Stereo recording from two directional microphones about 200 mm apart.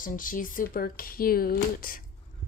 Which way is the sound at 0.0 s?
45° left (ahead or behind).